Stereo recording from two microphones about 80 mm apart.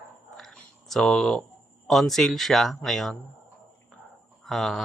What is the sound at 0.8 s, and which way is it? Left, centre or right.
Speech, centre.